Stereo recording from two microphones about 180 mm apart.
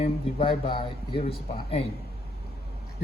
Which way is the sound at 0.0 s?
30° left (ahead or behind).